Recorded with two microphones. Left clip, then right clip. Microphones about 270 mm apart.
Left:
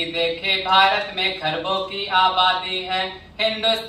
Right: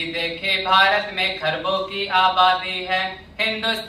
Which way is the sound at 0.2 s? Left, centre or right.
Centre.